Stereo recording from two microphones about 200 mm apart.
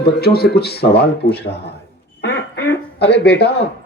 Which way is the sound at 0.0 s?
50° left (ahead or behind).